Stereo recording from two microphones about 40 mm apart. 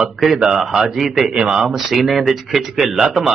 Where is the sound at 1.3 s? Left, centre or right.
Right.